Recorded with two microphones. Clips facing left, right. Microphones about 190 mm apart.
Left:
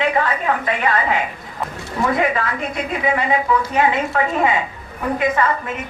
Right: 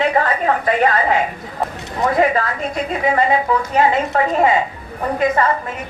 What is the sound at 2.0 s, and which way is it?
Speech, 40° right (ahead or behind).